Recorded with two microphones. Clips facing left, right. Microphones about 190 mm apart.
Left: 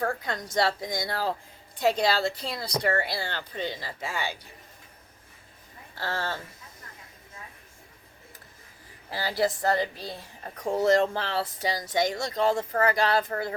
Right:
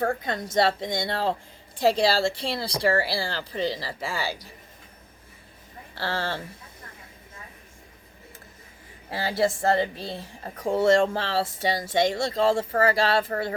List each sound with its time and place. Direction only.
0.2 s a woman's voice: 25° right (ahead or behind)
5.9 s a woman's voice: 30° right (ahead or behind)
9.1 s speech: 25° right (ahead or behind)